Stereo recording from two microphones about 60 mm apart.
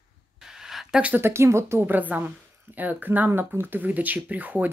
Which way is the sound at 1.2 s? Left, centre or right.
Right.